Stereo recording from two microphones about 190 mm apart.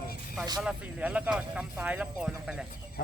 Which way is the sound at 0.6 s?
5° right (ahead or behind).